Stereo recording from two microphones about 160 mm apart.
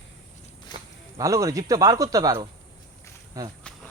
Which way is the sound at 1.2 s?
20° right (ahead or behind).